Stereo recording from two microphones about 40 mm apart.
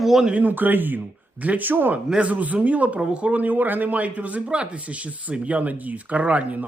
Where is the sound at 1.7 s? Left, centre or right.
Right.